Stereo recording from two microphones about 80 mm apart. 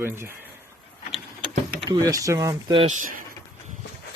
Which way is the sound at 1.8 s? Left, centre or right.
Right.